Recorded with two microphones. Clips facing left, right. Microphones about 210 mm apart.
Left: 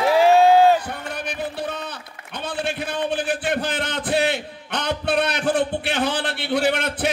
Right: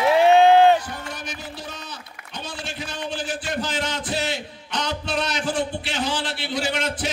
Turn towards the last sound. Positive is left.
turn(degrees=60)  # may be behind; listen again after turning